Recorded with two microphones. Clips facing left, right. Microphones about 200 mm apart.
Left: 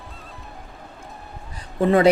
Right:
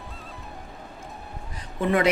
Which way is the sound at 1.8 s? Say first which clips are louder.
Left 6 dB; 30° left (ahead or behind).